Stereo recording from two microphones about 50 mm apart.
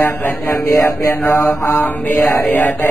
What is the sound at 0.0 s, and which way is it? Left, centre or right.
Speech, left.